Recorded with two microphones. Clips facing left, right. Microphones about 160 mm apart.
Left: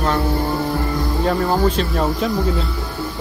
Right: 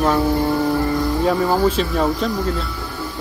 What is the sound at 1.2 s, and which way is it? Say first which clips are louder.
Speech: even; 5° right (ahead or behind).